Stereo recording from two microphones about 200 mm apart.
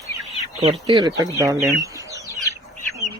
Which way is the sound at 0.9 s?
20° right (ahead or behind).